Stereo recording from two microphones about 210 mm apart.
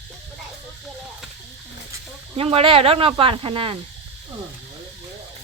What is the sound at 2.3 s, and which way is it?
Speech, 25° right (ahead or behind).